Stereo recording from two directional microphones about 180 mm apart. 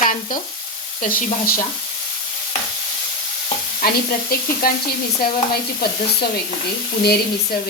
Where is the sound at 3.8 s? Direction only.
55° left (ahead or behind).